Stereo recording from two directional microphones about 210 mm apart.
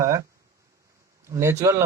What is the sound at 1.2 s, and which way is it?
Speech, 15° right (ahead or behind).